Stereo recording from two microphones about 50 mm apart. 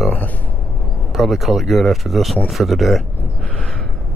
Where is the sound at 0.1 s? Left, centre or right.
Left.